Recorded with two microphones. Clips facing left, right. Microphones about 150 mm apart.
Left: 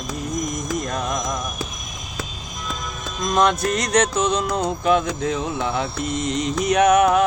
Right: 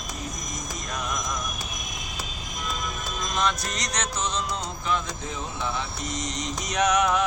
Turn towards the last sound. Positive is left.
turn(degrees=55)  # may be behind; listen again after turning